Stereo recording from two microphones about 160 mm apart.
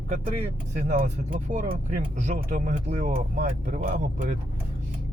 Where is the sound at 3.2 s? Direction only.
65° right (ahead or behind).